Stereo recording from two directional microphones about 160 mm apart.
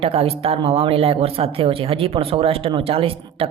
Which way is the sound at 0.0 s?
40° right (ahead or behind).